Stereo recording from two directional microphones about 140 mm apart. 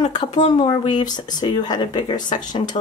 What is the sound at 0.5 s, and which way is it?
Speech, 35° left (ahead or behind).